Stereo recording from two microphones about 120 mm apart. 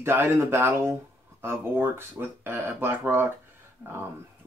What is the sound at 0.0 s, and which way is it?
Speech, 20° right (ahead or behind).